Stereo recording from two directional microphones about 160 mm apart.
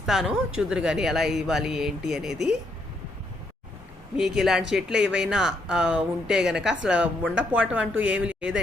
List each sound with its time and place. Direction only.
0.0 s speech: centre (ahead or behind)
4.2 s speech: centre (ahead or behind)